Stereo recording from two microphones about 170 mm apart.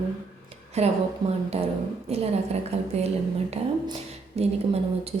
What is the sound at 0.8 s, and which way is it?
Speech, 40° right (ahead or behind).